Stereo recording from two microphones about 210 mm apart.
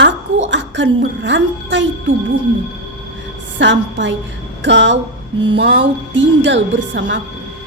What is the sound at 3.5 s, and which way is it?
A woman's voice, 60° right (ahead or behind).